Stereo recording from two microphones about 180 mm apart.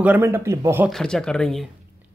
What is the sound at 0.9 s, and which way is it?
Speech, 5° left (ahead or behind).